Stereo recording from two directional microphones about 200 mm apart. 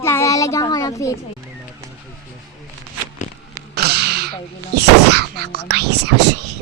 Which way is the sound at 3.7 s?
55° right (ahead or behind).